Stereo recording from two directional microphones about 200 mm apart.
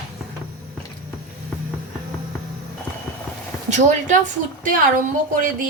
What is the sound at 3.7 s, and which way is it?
Speech, 35° right (ahead or behind).